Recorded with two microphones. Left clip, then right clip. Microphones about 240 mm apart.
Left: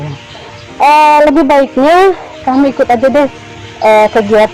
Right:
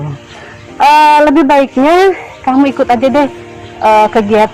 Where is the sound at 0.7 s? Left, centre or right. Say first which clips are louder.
Even; right.